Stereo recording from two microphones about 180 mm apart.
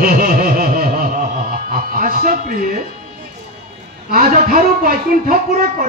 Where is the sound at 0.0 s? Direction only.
50° right (ahead or behind).